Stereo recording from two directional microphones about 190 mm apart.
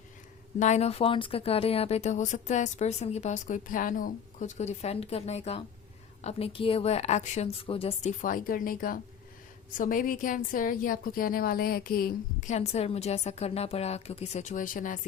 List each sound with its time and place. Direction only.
0.6 s speech: 35° left (ahead or behind)
8.2 s a woman's voice: 45° left (ahead or behind)